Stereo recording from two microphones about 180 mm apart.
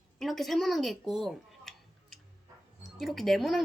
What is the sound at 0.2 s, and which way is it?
Speech, centre (ahead or behind).